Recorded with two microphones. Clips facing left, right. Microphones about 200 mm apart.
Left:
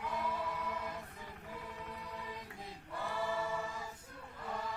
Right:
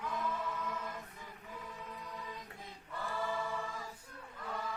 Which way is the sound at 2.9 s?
15° left (ahead or behind).